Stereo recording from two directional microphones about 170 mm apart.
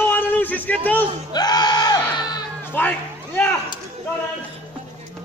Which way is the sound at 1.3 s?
25° left (ahead or behind).